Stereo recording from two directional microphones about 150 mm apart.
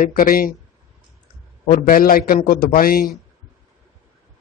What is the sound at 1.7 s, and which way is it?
Speech, 70° left (ahead or behind).